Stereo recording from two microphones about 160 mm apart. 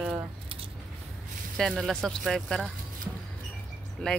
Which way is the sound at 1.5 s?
Centre (ahead or behind).